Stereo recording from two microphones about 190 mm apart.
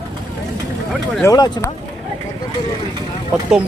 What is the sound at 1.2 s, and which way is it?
Speech, 20° left (ahead or behind).